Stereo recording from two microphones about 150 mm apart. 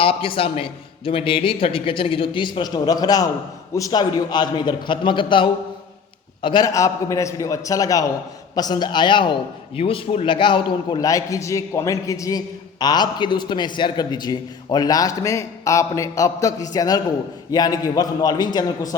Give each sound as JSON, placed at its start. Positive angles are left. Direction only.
{"t": 0.0, "sound": "a man's voice", "side_deg": 35}